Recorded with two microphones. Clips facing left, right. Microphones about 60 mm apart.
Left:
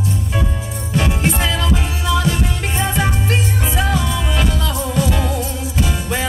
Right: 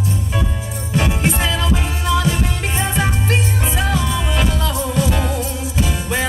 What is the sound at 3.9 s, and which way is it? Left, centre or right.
Music, centre.